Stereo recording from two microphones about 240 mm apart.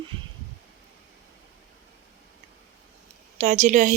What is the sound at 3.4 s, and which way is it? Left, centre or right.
Speech, right.